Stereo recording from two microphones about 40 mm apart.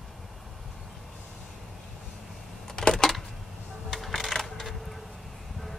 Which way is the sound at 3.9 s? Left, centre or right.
Centre.